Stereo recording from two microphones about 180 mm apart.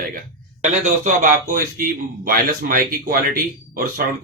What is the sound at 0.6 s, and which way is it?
Speech, 45° right (ahead or behind).